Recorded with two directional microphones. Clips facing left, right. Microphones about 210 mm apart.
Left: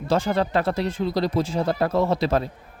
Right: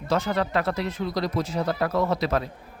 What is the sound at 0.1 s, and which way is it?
Speech, 30° left (ahead or behind).